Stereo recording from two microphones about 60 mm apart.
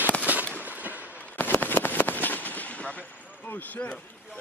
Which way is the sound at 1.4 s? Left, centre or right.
Left.